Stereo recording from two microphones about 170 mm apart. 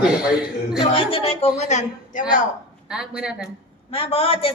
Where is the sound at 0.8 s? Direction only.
30° left (ahead or behind).